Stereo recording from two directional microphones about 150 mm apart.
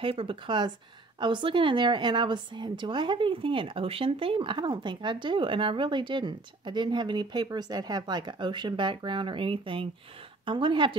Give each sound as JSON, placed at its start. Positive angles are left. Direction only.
{"t": 0.0, "sound": "a woman's voice", "side_deg": -35}